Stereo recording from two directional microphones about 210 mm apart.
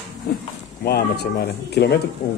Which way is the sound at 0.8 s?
50° left (ahead or behind).